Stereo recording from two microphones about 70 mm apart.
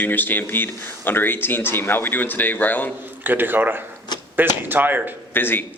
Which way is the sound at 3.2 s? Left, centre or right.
Right.